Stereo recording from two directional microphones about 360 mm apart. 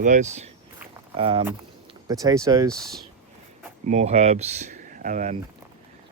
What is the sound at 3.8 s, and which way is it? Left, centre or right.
Speech, centre.